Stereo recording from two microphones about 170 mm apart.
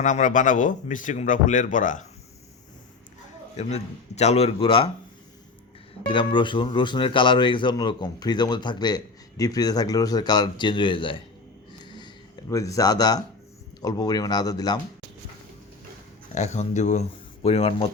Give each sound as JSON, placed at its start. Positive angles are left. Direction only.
{"t": 0.0, "sound": "speech", "side_deg": 50}
{"t": 3.6, "sound": "speech", "side_deg": 40}
{"t": 6.1, "sound": "speech", "side_deg": 30}
{"t": 11.9, "sound": "a sound", "side_deg": 25}
{"t": 13.8, "sound": "speech", "side_deg": 25}
{"t": 16.3, "sound": "speech", "side_deg": 45}